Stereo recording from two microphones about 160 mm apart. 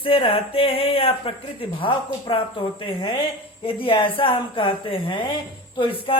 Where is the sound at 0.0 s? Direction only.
35° left (ahead or behind).